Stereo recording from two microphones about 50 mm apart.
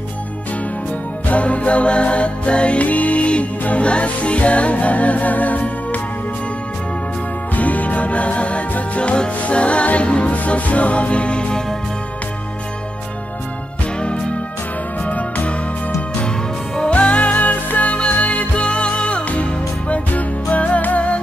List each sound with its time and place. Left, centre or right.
1.2 s music: left
7.5 s music: left
14.0 s music: centre
16.9 s music: left